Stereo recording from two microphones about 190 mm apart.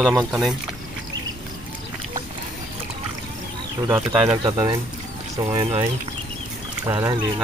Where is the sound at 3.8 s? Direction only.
10° right (ahead or behind).